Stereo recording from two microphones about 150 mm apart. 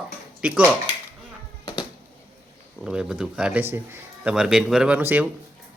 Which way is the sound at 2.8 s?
5° right (ahead or behind).